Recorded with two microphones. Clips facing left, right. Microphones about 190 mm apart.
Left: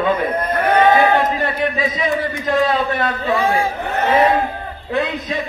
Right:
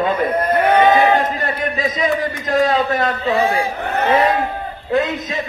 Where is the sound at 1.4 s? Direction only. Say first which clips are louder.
Left 1 dB; 45° right (ahead or behind).